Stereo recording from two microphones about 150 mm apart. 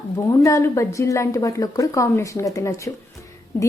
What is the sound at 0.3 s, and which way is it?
A woman's voice, 20° left (ahead or behind).